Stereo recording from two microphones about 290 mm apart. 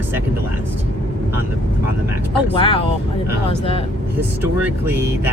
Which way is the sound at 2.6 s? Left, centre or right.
Centre.